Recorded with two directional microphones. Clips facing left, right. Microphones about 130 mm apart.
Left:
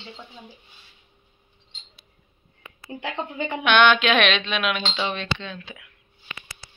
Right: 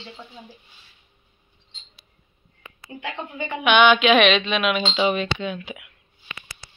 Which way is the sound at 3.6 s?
5° right (ahead or behind).